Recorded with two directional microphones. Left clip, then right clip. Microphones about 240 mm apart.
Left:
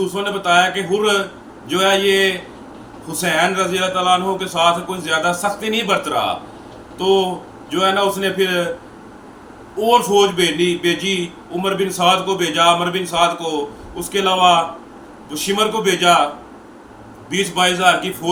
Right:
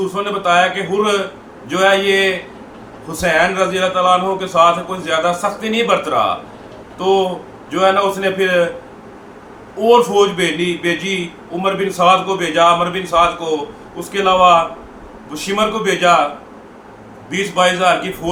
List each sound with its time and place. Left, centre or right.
0.1 s a man's voice: centre
9.8 s a man's voice: centre
17.2 s a man's voice: centre